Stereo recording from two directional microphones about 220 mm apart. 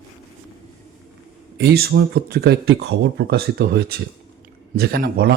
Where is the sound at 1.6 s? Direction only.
45° right (ahead or behind).